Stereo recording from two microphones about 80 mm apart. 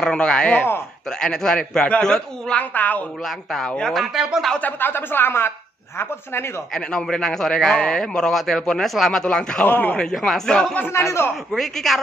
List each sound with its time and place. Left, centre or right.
0.0 s speech: centre
0.5 s a woman's voice: left
1.2 s a man's voice: centre
3.3 s a man's voice: centre
4.6 s a woman's voice: left
6.7 s a man's voice: centre
9.7 s a woman's voice: left
10.1 s a man's voice: centre
10.9 s a man's voice: left
11.5 s a man's voice: centre